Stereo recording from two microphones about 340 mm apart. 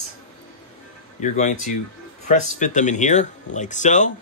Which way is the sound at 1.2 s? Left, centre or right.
Left.